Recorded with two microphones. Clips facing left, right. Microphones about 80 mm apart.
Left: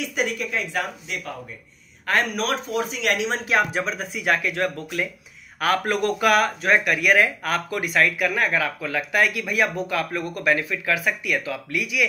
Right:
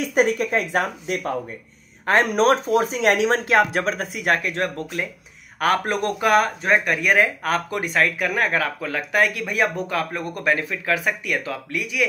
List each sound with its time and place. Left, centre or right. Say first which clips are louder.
0.0 s speech: right 6 dB; right
2.0 s speech: right 6 dB; right
3.3 s speech: right 4 dB; right